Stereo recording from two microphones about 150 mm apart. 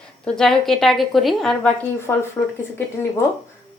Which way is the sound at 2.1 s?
20° left (ahead or behind).